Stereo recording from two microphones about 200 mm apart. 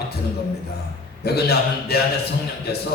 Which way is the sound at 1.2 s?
50° left (ahead or behind).